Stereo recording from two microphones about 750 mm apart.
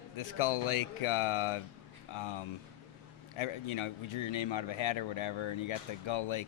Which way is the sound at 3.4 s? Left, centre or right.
Left.